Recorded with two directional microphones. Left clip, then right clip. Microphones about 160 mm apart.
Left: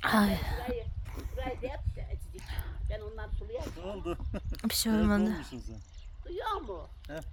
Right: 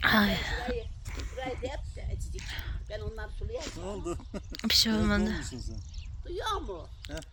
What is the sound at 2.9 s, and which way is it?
Speech, 65° right (ahead or behind).